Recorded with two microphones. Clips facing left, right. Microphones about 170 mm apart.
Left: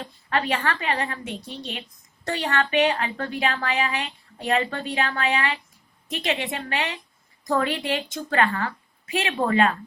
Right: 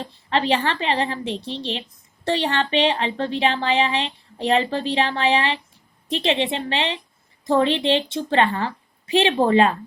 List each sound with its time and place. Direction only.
0.0 s speech: 30° right (ahead or behind)